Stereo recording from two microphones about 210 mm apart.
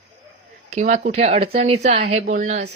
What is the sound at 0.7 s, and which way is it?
A woman's voice, 35° right (ahead or behind).